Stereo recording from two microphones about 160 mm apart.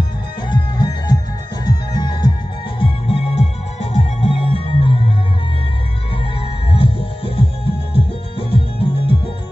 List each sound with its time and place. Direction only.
0.5 s music: 25° left (ahead or behind)
2.8 s music: 40° left (ahead or behind)
6.7 s music: 35° left (ahead or behind)